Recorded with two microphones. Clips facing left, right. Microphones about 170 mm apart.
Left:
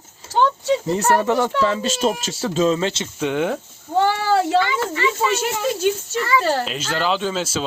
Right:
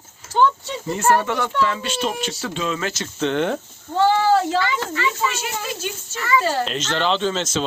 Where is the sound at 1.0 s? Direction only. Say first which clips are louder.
Right 3 dB; 35° left (ahead or behind).